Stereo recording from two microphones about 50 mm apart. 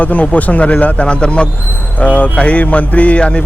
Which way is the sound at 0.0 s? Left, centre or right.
Left.